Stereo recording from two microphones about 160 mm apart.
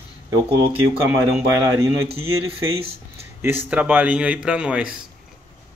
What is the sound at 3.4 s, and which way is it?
Speech, 10° right (ahead or behind).